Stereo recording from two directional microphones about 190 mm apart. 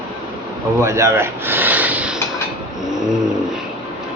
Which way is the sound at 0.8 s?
15° right (ahead or behind).